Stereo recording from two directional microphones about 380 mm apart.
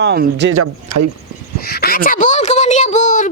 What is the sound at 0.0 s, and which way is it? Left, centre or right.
Speech, right.